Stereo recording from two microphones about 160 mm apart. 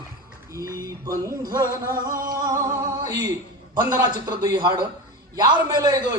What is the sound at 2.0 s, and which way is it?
Singing, 60° right (ahead or behind).